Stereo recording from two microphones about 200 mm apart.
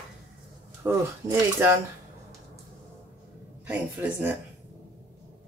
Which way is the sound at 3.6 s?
10° right (ahead or behind).